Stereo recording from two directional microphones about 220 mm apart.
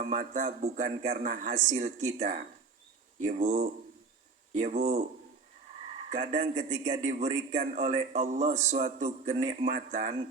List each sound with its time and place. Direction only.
0.0 s a man's voice: 35° right (ahead or behind)
6.1 s a man's voice: 35° right (ahead or behind)